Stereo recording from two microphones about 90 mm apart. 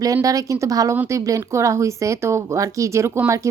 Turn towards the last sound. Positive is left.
turn(degrees=-25)  # may be behind; listen again after turning